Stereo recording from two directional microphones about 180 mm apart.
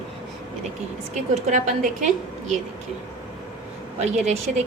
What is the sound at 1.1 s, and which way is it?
A woman's voice, 40° right (ahead or behind).